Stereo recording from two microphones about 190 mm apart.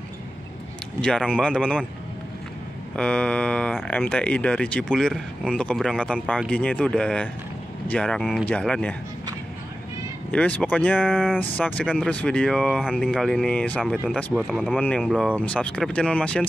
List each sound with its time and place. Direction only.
1.0 s speech: 5° left (ahead or behind)
3.0 s speech: 5° left (ahead or behind)
10.3 s speech: 5° left (ahead or behind)
11.1 s speech: 5° right (ahead or behind)
11.5 s speech: 10° left (ahead or behind)
14.1 s speech: 5° right (ahead or behind)